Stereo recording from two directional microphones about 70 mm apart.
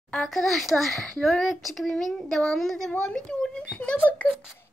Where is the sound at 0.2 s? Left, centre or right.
Centre; by 4.3 s left.